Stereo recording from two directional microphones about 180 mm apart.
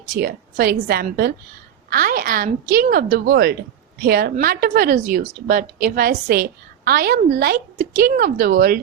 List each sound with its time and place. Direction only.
0.2 s a woman's voice: 60° right (ahead or behind)